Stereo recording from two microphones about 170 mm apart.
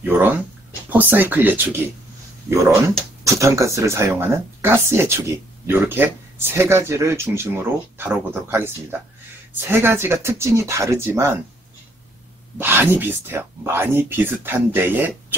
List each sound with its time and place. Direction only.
0.0 s a sound: 10° right (ahead or behind)
0.8 s speech: 10° right (ahead or behind)
12.5 s speech: 10° right (ahead or behind)